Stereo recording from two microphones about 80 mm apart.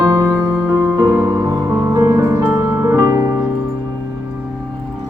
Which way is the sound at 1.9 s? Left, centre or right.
Right.